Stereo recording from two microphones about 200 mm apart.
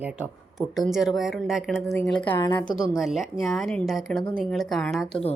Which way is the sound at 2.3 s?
15° left (ahead or behind).